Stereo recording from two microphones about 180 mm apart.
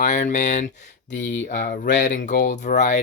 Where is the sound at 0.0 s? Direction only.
45° left (ahead or behind).